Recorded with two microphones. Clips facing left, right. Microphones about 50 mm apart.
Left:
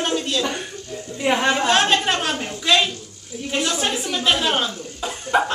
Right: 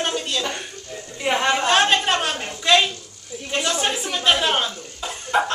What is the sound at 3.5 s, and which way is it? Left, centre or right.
Speech, centre.